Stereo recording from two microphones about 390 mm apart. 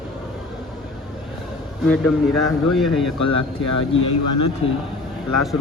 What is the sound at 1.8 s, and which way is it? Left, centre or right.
A man's voice, centre.